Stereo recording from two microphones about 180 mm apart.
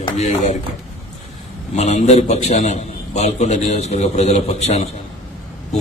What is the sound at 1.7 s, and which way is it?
A man's voice, 40° left (ahead or behind).